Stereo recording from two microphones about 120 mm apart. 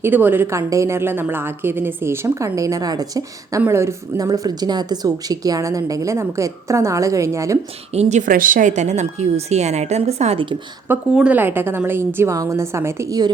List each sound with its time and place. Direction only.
0.0 s speech: 15° right (ahead or behind)
7.9 s a woman's voice: 80° right; by 10.4 s 60° right (ahead or behind)
10.8 s speech: 10° right (ahead or behind); by 13.3 s 30° right (ahead or behind)